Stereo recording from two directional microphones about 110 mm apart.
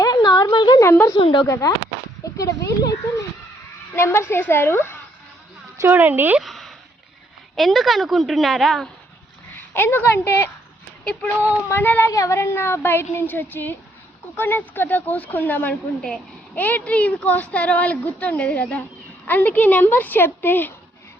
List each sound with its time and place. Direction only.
0.0 s a sound: 40° left (ahead or behind)
0.8 s a woman's voice: 20° left (ahead or behind)
1.2 s speech: 50° left (ahead or behind)
1.5 s a woman's voice: 30° left (ahead or behind)
3.9 s a woman's voice: 25° left (ahead or behind)
5.8 s speech: 20° right (ahead or behind)
6.4 s a sound: centre (ahead or behind)
7.5 s a woman's voice: centre (ahead or behind)
9.7 s a woman's voice: 20° left (ahead or behind)
11.0 s a woman's voice: 10° left (ahead or behind)
12.1 s a woman's voice: 30° left (ahead or behind)
16.0 s a woman's voice: 5° left (ahead or behind)